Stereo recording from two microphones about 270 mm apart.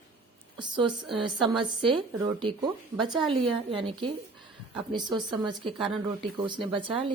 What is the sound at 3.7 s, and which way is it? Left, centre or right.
A woman's voice, centre.